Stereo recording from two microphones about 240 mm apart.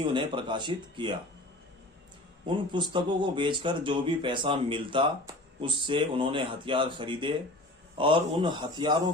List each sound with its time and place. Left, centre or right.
0.0 s speech: centre
2.5 s speech: centre